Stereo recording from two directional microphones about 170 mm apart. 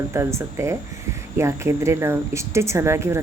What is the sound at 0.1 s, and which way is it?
Speech, 15° right (ahead or behind).